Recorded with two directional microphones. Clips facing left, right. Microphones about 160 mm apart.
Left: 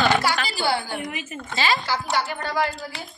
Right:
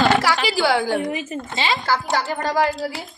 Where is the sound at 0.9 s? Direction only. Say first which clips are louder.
Right 8 dB; 35° right (ahead or behind).